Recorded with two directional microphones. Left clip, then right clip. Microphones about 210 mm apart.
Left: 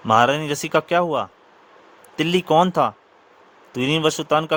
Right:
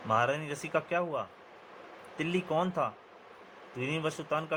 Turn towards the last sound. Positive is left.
turn(degrees=55)  # may be behind; listen again after turning